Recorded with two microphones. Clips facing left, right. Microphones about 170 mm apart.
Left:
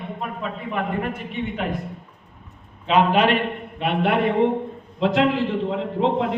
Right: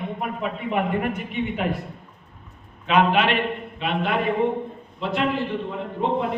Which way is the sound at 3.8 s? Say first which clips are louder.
Left 4 dB; 60° left (ahead or behind).